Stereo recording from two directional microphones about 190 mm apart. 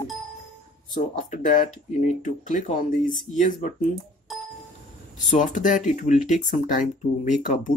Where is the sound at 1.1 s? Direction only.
45° left (ahead or behind).